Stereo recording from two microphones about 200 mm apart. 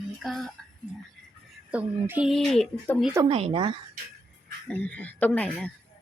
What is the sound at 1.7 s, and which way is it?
A woman's voice, 5° right (ahead or behind).